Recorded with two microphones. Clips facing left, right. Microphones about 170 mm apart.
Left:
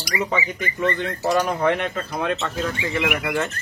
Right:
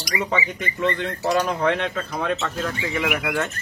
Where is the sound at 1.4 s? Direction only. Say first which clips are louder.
Left 1 dB; 10° left (ahead or behind).